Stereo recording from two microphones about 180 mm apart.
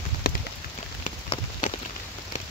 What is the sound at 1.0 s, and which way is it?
Rain on surface, 45° left (ahead or behind).